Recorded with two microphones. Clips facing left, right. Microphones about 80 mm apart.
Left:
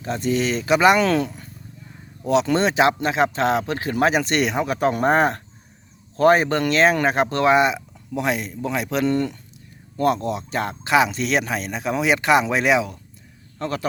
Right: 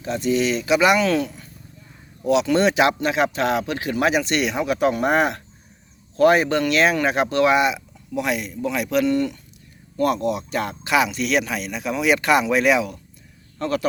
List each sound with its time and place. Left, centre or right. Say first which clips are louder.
0.0 s speech: right 1 dB; left